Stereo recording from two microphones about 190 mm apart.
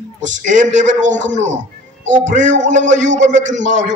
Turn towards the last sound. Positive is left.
turn(degrees=-40)  # may be behind; listen again after turning